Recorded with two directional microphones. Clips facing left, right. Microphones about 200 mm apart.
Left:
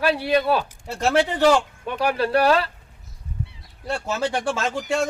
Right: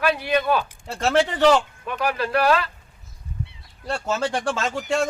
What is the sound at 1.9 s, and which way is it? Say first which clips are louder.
Speech: left 3 dB; 30° left (ahead or behind).